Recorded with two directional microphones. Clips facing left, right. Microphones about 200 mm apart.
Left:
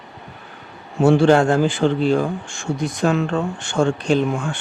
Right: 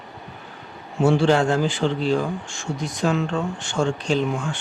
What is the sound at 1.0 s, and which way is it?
A man's voice, 55° left (ahead or behind).